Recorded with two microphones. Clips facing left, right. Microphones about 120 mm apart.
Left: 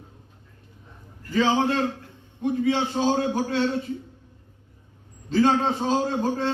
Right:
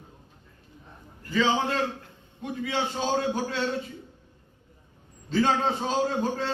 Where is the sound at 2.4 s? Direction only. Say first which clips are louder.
Left 7 dB; 30° left (ahead or behind).